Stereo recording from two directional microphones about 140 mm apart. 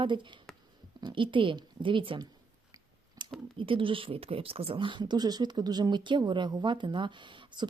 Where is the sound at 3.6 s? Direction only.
40° right (ahead or behind).